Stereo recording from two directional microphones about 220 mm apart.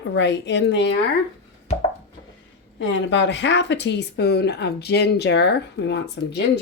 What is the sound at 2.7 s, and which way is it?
Speech, 55° left (ahead or behind).